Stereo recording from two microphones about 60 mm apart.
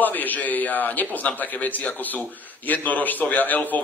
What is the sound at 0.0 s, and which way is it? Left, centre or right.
A man's voice, left.